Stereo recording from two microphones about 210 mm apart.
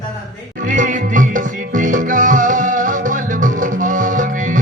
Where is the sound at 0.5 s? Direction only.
35° right (ahead or behind).